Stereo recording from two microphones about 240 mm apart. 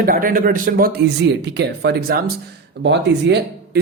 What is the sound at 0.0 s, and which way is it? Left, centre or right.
Speech, right.